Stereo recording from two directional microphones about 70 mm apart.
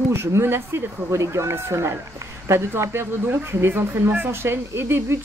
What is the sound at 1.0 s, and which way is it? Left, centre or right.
Speech, right.